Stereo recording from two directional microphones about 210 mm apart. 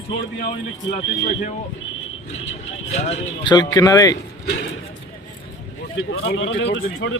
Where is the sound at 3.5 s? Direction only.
20° left (ahead or behind).